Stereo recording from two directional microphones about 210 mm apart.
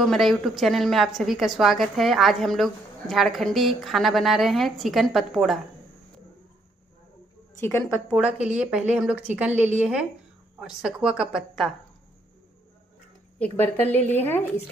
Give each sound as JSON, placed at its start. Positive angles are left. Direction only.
{"t": 0.0, "sound": "a woman's voice", "side_deg": 0}
{"t": 7.6, "sound": "a woman's voice", "side_deg": 10}
{"t": 8.4, "sound": "a woman's voice", "side_deg": -5}
{"t": 13.4, "sound": "a woman's voice", "side_deg": 10}